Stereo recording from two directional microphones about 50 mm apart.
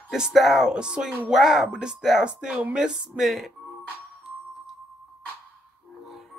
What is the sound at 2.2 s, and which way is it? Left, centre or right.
Music, right.